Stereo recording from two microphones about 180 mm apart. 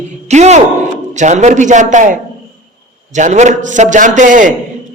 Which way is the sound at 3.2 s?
40° right (ahead or behind).